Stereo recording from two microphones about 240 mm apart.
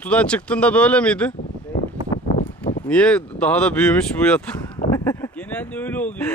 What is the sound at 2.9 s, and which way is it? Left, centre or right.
Speech, centre.